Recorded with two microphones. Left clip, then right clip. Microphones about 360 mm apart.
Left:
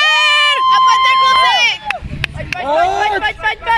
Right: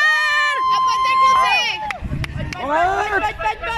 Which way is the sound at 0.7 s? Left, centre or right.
Left.